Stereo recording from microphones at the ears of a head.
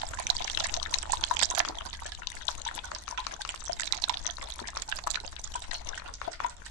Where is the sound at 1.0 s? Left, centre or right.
Right.